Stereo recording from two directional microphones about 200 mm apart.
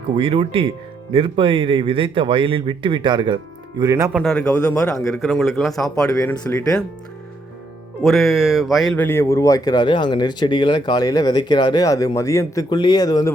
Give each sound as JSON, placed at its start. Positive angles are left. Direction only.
{"t": 0.2, "sound": "speech", "side_deg": -30}
{"t": 4.1, "sound": "speech", "side_deg": 0}
{"t": 6.1, "sound": "speech", "side_deg": 15}
{"t": 8.0, "sound": "speech", "side_deg": 0}